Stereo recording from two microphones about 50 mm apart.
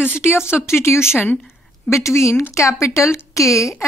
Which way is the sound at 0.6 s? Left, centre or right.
Left.